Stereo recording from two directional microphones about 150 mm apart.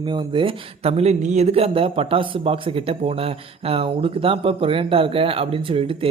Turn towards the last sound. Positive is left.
turn(degrees=-40)  # may be behind; listen again after turning